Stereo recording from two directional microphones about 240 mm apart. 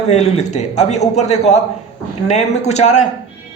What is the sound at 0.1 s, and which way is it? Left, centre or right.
A man's voice, left.